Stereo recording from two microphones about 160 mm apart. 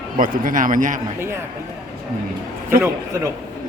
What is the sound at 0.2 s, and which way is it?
Speech, 55° right (ahead or behind).